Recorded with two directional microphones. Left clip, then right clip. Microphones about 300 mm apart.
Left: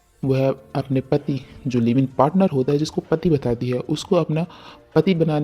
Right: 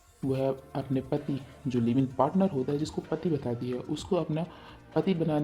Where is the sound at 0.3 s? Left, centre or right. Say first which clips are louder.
Left 9 dB; left.